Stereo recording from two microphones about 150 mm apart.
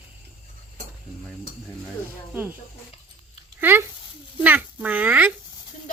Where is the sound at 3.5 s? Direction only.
15° right (ahead or behind).